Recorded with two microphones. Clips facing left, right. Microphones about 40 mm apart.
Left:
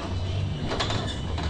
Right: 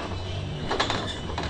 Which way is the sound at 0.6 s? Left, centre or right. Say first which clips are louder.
Right 3 dB; right.